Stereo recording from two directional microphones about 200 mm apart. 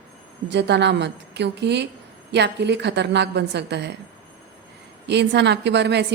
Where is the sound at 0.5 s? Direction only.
60° right (ahead or behind).